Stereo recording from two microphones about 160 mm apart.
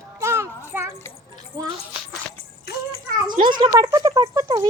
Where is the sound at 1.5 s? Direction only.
20° right (ahead or behind).